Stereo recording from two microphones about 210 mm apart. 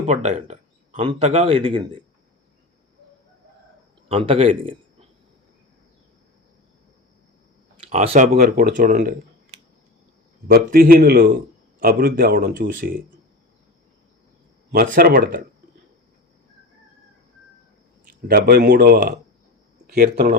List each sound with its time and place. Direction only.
0.0 s speech: 35° right (ahead or behind)
4.1 s speech: 25° right (ahead or behind)
7.9 s speech: 30° right (ahead or behind)
8.1 s speech: 40° right (ahead or behind)
10.5 s speech: 45° right (ahead or behind)
14.7 s speech: 45° right (ahead or behind)
18.0 s speech: 45° right (ahead or behind)